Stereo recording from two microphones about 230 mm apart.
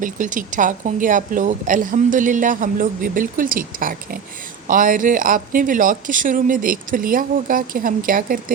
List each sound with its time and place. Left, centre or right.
0.0 s a woman's voice: right